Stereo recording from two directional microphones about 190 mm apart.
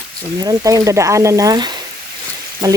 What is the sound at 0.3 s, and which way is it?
Speech, 20° right (ahead or behind).